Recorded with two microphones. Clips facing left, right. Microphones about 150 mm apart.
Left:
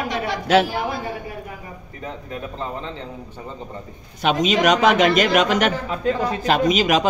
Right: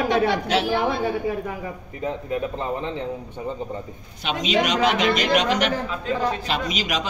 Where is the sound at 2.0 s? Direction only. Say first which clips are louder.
Right 6 dB; 20° right (ahead or behind).